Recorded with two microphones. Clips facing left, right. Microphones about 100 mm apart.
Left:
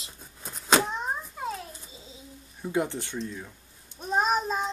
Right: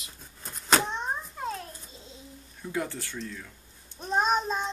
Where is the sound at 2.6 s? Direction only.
20° left (ahead or behind).